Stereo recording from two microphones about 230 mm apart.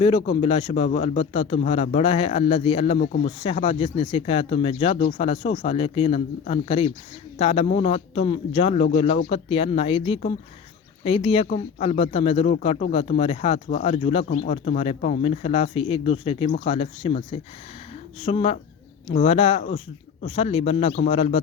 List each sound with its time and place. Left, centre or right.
0.0 s speech: left
3.0 s speech: left
3.4 s speech: left